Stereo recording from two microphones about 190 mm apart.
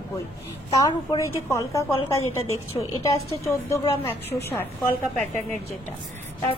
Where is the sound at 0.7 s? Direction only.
20° left (ahead or behind).